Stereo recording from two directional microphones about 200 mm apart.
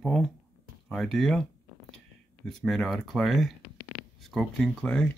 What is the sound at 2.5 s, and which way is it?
Speech, 5° left (ahead or behind).